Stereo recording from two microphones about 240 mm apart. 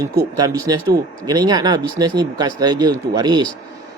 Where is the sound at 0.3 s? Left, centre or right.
Centre.